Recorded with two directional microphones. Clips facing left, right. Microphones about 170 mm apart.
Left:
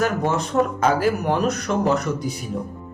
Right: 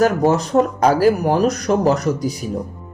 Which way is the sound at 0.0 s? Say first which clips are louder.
Right 6 dB; 35° right (ahead or behind).